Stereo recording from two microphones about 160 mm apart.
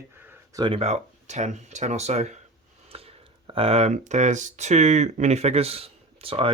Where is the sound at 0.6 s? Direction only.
35° right (ahead or behind).